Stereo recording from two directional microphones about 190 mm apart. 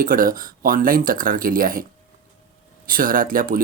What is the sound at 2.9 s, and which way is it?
Speech, 45° right (ahead or behind).